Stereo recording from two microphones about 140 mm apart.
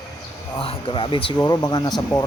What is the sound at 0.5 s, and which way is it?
Speech, 40° left (ahead or behind).